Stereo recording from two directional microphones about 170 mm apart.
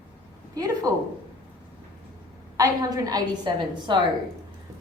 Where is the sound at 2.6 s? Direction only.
20° right (ahead or behind).